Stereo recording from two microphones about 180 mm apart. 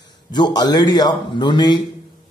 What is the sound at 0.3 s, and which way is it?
A man's voice, 25° left (ahead or behind).